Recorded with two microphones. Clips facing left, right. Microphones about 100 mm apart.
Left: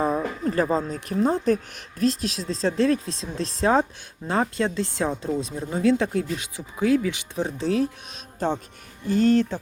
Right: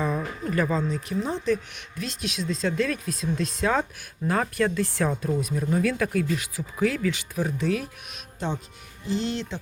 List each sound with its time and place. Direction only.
0.0 s a sound: 35° left (ahead or behind)
1.0 s speech: 45° left (ahead or behind)
8.4 s speech: 40° left (ahead or behind)